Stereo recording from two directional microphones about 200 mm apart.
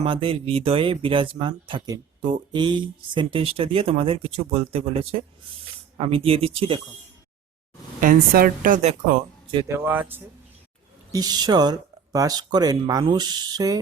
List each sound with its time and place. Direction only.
0.0 s speech: 25° right (ahead or behind)
8.0 s speech: 45° right (ahead or behind)
9.7 s speech: 10° right (ahead or behind)